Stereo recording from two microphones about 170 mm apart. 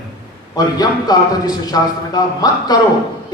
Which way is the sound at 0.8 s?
20° left (ahead or behind).